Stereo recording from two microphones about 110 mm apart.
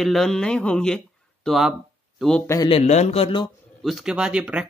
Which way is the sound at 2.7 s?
80° left.